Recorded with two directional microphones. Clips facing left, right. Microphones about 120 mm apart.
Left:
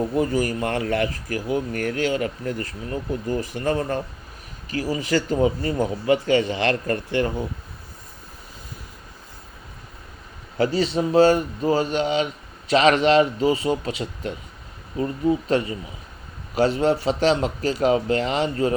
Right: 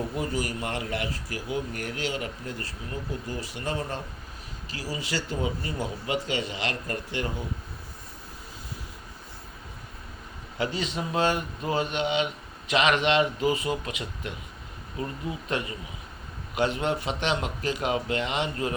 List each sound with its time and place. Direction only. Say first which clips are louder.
0.2 s speech: left 10 dB; 45° left (ahead or behind)
3.2 s speech: left 12 dB; 50° left (ahead or behind)
6.5 s speech: left 9 dB; 60° left (ahead or behind)
10.6 s speech: left 9 dB; 35° left (ahead or behind)